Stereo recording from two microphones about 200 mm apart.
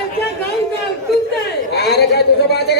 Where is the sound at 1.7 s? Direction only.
55° left (ahead or behind).